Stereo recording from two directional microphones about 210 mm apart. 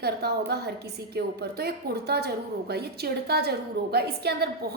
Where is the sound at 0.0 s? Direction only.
50° right (ahead or behind).